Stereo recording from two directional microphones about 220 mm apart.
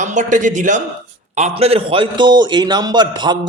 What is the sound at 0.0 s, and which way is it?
A man's voice, 35° right (ahead or behind).